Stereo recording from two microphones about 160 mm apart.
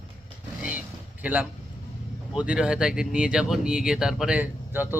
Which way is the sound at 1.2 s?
10° right (ahead or behind).